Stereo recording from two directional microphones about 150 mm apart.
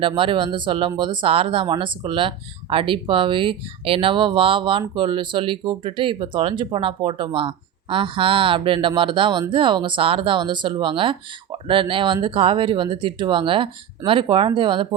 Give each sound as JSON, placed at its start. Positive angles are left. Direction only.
{"t": 0.0, "sound": "speech", "side_deg": -35}